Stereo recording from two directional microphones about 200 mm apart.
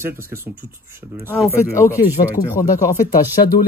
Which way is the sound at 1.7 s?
15° left (ahead or behind).